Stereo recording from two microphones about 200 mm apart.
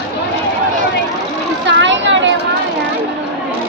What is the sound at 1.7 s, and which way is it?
Vehicle, 65° right (ahead or behind).